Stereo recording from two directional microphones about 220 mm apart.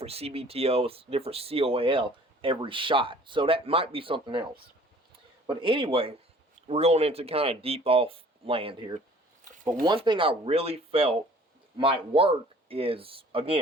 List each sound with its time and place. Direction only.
0.0 s speech: 25° right (ahead or behind)
5.5 s speech: 20° right (ahead or behind)
12.1 s speech: 25° right (ahead or behind)